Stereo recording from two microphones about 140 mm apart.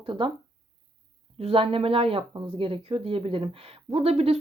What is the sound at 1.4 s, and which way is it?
Speech, 40° right (ahead or behind).